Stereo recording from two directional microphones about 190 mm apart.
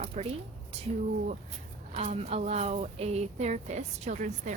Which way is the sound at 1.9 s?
35° right (ahead or behind).